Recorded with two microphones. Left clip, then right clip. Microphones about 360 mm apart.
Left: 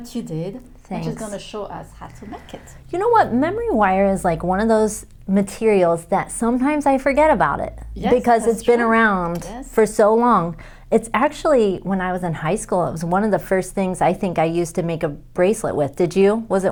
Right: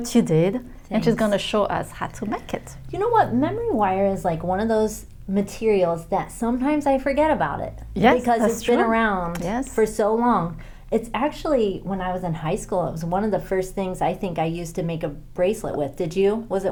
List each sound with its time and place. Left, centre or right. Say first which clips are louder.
0.0 s a woman's voice: right 9 dB; right
2.9 s a woman's voice: left 4 dB; left
8.7 s a woman's voice: left 5 dB; left